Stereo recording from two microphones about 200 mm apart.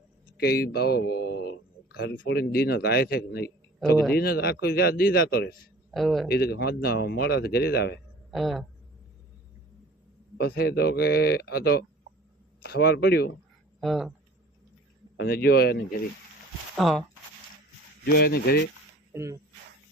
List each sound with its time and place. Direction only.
0.3 s speech: 50° left (ahead or behind)
5.9 s speech: centre (ahead or behind)
6.2 s speech: 50° left (ahead or behind)
8.3 s speech: centre (ahead or behind)
10.3 s speech: 55° left (ahead or behind)
13.8 s speech: centre (ahead or behind)
15.2 s speech: 50° left (ahead or behind)
16.7 s speech: centre (ahead or behind)
18.0 s speech: 50° left (ahead or behind)
19.1 s speech: 15° right (ahead or behind)